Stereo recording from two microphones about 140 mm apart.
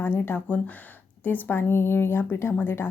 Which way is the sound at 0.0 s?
15° left (ahead or behind).